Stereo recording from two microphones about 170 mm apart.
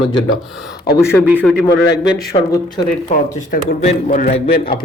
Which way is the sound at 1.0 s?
5° right (ahead or behind).